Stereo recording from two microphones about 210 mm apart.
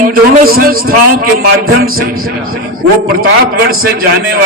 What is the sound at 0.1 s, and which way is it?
A man's voice, 45° right (ahead or behind).